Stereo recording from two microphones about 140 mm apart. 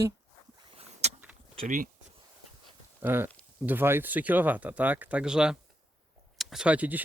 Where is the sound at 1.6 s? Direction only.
70° right (ahead or behind).